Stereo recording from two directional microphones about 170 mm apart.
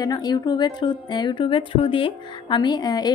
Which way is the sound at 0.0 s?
25° left (ahead or behind).